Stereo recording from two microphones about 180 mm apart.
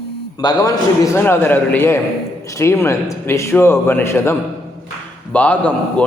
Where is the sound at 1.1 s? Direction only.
15° left (ahead or behind).